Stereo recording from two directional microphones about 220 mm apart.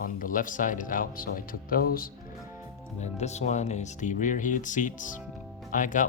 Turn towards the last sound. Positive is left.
turn(degrees=35)  # may be behind; listen again after turning